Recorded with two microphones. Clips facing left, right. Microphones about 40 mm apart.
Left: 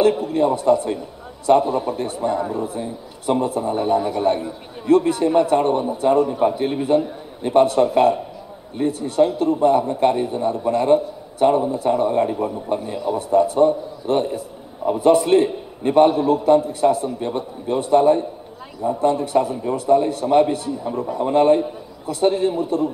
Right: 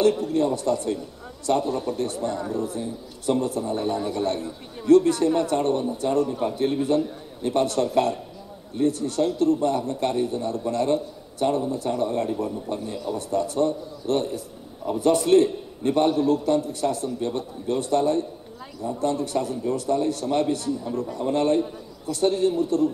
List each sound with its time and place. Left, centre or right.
0.0 s a man's voice: centre